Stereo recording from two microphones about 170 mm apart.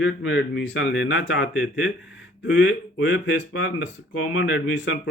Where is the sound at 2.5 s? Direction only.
90° left.